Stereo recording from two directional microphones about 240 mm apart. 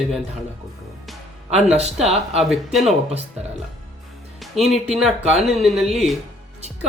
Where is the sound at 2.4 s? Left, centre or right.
Centre.